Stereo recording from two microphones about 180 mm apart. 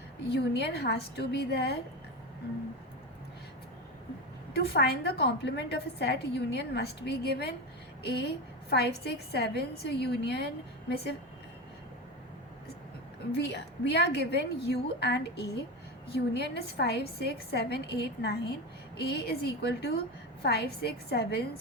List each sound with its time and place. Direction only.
0.3 s a woman's voice: 65° left (ahead or behind)
4.5 s a woman's voice: 65° left (ahead or behind)
8.7 s a woman's voice: 65° left (ahead or behind)
13.3 s a woman's voice: 70° left (ahead or behind)